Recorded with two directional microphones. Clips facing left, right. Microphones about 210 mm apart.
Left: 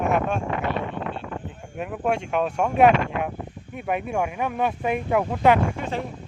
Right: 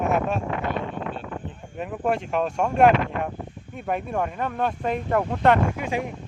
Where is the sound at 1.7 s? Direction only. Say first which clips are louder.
Even; centre (ahead or behind).